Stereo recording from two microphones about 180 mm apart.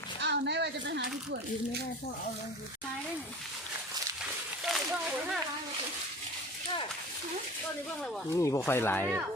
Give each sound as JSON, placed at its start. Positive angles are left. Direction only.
{"t": 0.2, "sound": "a child's voice", "side_deg": -75}
{"t": 4.2, "sound": "a sound", "side_deg": -5}
{"t": 8.3, "sound": "speech", "side_deg": 15}